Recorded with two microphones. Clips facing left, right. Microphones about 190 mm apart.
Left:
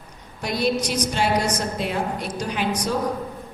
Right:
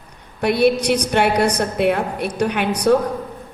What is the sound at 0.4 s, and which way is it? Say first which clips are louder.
A woman's voice: right 7 dB; 60° right (ahead or behind).